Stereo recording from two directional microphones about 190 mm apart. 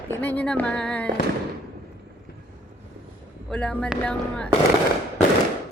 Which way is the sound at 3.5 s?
5° left (ahead or behind).